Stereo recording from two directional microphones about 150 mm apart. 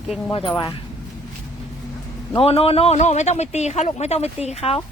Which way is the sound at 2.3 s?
40° left (ahead or behind).